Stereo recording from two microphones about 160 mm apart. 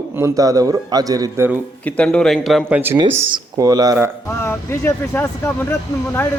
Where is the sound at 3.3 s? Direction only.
25° right (ahead or behind).